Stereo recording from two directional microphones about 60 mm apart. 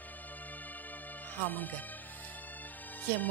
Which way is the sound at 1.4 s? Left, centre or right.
Left.